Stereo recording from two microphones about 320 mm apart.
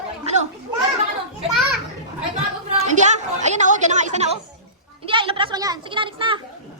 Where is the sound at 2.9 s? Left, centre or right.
Right.